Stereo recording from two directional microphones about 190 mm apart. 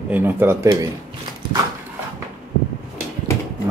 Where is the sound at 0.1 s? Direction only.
10° right (ahead or behind).